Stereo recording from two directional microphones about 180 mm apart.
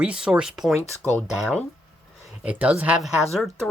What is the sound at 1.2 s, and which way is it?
Speech, 10° left (ahead or behind).